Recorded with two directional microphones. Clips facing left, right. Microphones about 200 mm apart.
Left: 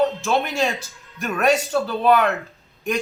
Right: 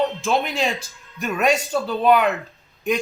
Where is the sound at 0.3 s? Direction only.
15° right (ahead or behind).